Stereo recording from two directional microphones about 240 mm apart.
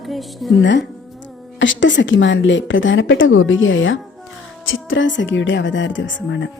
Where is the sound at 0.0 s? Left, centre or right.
Centre.